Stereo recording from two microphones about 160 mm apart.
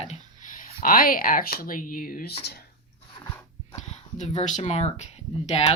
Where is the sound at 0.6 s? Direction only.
60° left (ahead or behind).